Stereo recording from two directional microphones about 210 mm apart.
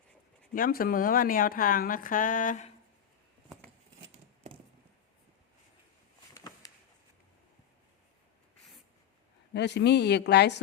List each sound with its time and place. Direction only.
0.5 s speech: 45° left (ahead or behind)
6.3 s a sound: 15° left (ahead or behind)
9.5 s a woman's voice: 55° left (ahead or behind)